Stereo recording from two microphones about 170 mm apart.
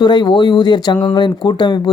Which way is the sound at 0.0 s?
25° left (ahead or behind).